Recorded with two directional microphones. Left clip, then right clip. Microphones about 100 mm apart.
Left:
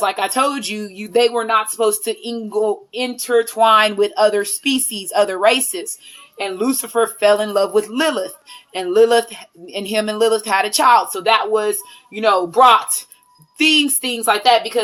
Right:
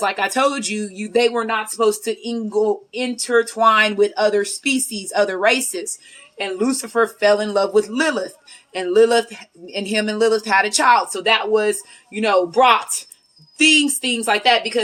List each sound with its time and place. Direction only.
0.0 s speech: 35° left (ahead or behind)